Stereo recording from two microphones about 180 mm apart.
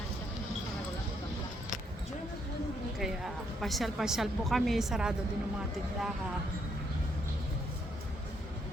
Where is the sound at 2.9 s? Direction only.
Centre (ahead or behind).